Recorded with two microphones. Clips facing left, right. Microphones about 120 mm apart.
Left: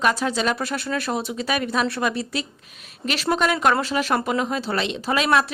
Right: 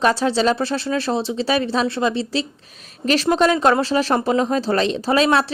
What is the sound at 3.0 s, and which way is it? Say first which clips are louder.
Speech: right 6 dB; 40° right (ahead or behind).